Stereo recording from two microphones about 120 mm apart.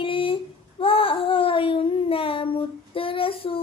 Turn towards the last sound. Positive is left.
turn(degrees=50)  # may be behind; listen again after turning